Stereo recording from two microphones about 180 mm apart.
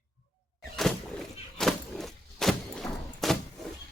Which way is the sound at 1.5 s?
Centre (ahead or behind).